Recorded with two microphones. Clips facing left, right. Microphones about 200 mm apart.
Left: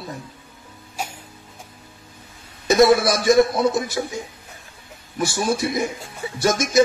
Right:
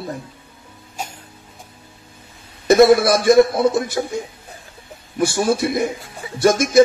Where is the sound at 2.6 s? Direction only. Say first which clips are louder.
Right 4 dB; 55° right (ahead or behind).